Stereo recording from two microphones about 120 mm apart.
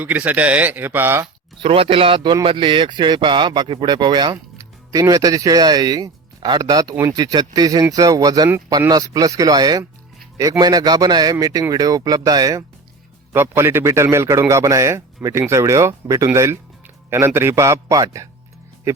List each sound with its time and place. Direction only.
0.0 s speech: 15° right (ahead or behind)
1.5 s speech: 50° right (ahead or behind); by 12.6 s 30° right (ahead or behind)
13.3 s a man's voice: 20° right (ahead or behind)